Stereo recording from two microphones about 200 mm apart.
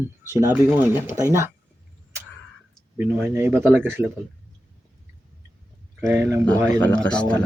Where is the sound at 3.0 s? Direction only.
10° right (ahead or behind).